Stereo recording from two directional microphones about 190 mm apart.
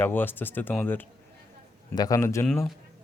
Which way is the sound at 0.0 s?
10° left (ahead or behind).